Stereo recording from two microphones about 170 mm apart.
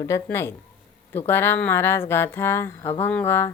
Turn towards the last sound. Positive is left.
turn(degrees=15)  # may be behind; listen again after turning